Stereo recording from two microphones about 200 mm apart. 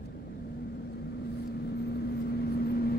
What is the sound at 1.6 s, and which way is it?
Vehicle, 55° left (ahead or behind).